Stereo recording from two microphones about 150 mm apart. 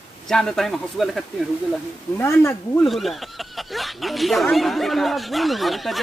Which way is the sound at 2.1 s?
15° left (ahead or behind).